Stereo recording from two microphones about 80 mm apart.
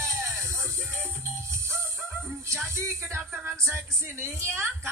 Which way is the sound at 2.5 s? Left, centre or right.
Right.